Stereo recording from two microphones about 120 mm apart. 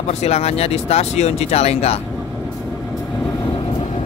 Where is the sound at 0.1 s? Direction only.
60° left (ahead or behind).